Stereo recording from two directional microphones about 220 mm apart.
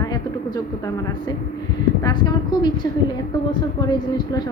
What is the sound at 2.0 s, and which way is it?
Speech, 20° left (ahead or behind).